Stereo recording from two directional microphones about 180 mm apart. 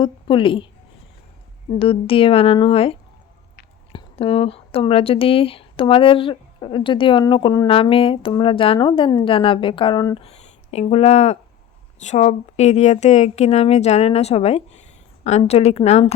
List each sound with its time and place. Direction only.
0.0 s speech: 30° left (ahead or behind)
1.7 s speech: 30° left (ahead or behind)
10.2 s speech: 35° left (ahead or behind)